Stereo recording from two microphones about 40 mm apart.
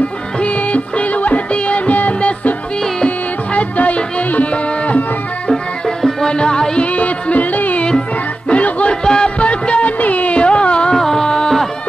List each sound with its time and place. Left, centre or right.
0.4 s music: left
3.5 s music: left
5.5 s music: centre
6.9 s music: left
9.0 s music: left
11.0 s music: centre